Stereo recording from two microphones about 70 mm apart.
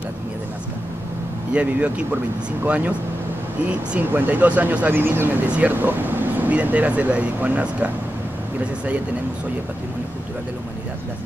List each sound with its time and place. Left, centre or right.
1.5 s speech: centre
4.0 s speech: right